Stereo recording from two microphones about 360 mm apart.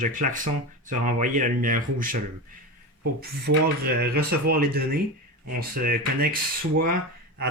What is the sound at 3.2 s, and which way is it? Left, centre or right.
Speech, right.